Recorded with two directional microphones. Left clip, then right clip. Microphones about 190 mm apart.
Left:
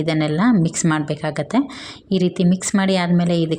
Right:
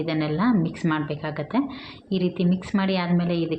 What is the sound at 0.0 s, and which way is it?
A woman's voice, 45° left (ahead or behind).